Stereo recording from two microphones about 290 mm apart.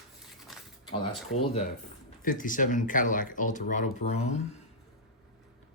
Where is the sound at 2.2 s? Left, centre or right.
Left.